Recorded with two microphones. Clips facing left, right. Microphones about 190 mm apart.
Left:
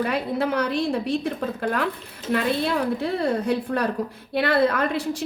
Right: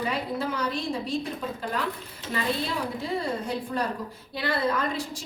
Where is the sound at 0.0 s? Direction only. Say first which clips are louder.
Left 5 dB; 60° left (ahead or behind).